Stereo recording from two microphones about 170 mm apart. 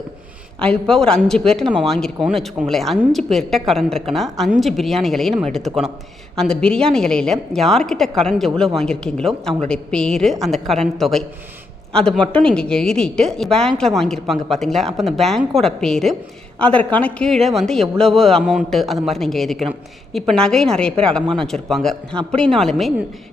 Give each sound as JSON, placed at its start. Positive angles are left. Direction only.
{"t": 0.6, "sound": "a woman's voice", "side_deg": 5}